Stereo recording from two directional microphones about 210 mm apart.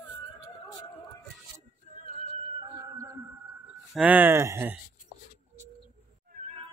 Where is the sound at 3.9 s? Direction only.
5° right (ahead or behind).